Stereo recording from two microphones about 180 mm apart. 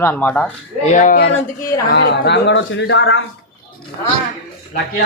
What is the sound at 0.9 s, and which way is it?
Speech, 45° left (ahead or behind).